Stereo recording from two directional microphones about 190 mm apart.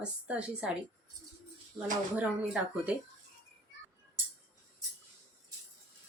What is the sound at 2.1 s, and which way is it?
Speech, 5° right (ahead or behind).